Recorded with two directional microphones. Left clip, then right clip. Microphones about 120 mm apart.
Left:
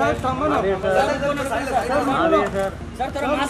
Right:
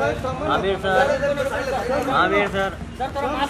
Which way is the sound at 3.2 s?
45° left (ahead or behind).